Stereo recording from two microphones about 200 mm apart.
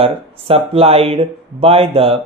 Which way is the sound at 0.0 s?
30° right (ahead or behind).